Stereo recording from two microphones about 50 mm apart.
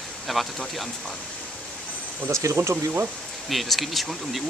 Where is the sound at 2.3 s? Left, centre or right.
Right.